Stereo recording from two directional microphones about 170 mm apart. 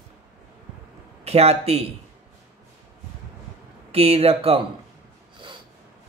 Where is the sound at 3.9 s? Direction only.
35° right (ahead or behind).